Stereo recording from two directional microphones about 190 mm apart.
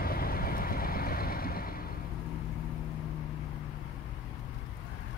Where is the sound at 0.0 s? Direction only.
50° left (ahead or behind).